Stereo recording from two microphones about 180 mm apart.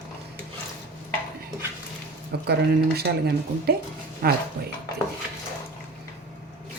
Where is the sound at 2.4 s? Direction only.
60° right (ahead or behind).